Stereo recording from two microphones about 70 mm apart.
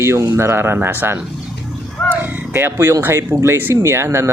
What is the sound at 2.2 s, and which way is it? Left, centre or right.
Speech, right.